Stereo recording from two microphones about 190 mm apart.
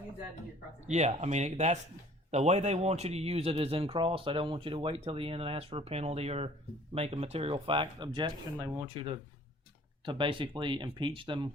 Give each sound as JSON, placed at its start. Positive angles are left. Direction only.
{"t": 0.9, "sound": "speech", "side_deg": -35}